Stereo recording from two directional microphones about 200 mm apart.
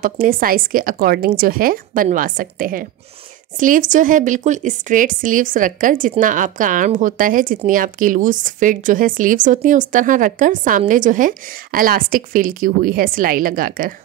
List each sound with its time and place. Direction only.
0.0 s a woman's voice: 45° right (ahead or behind)